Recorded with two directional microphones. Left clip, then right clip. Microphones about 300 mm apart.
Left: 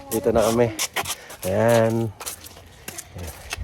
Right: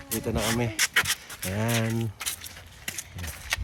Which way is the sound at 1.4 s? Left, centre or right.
Left.